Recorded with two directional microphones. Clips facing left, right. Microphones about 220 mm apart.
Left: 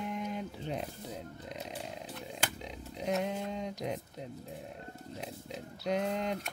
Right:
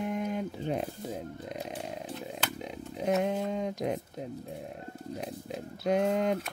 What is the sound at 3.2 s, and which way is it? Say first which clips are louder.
Speech: right 6 dB; 50° right (ahead or behind).